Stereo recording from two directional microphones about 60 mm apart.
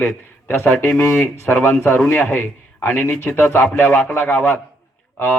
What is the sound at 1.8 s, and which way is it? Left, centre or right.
A man's voice, left.